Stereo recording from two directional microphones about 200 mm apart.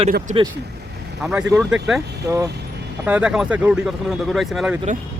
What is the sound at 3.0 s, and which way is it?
Speech, 5° right (ahead or behind).